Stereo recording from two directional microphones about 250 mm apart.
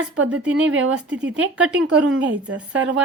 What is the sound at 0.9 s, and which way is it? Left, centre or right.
Speech, centre.